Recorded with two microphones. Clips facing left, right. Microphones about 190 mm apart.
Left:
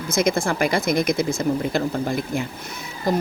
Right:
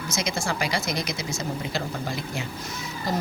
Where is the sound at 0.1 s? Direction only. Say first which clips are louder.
Left 8 dB; 55° left (ahead or behind).